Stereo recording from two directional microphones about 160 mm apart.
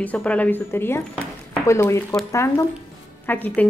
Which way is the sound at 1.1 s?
5° left (ahead or behind).